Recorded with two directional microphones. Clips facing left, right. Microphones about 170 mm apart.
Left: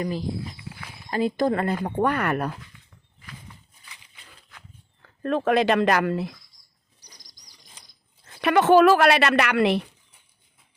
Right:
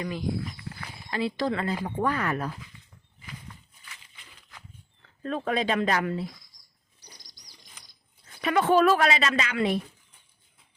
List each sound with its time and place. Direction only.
0.0 s speech: 35° left (ahead or behind)
0.5 s a sound: 5° left (ahead or behind)
1.1 s speech: 45° left (ahead or behind); by 2.6 s 60° left (ahead or behind)
5.2 s a woman's voice: 75° left (ahead or behind)
8.4 s a woman's voice: 75° left (ahead or behind)